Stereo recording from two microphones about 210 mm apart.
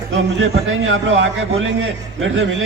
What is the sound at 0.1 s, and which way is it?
A man's voice, 70° right (ahead or behind).